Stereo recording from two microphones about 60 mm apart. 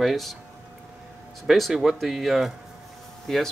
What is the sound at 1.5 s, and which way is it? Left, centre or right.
Speech, centre.